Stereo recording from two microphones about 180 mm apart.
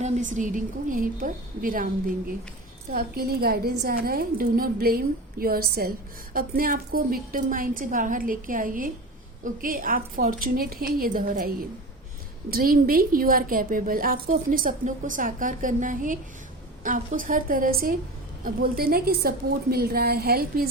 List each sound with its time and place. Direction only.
0.0 s a woman's voice: 45° right (ahead or behind)